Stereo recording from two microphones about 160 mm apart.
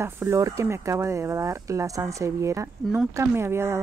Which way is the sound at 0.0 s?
20° right (ahead or behind).